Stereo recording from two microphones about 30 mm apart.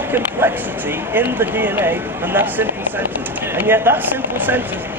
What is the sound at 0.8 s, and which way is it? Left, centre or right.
Speech, right.